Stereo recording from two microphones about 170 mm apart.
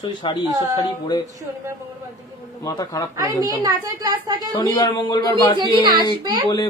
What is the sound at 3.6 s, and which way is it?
Speech, 20° right (ahead or behind).